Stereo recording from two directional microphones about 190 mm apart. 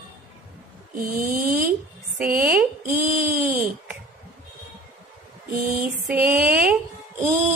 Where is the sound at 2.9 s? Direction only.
45° right (ahead or behind).